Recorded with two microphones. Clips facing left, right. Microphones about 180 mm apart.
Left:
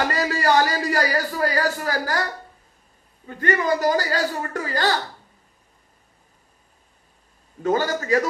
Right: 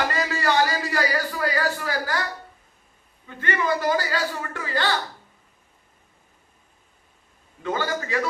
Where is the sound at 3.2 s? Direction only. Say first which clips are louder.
Left 3 dB; 40° left (ahead or behind).